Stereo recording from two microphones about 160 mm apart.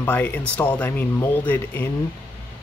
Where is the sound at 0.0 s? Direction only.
10° left (ahead or behind).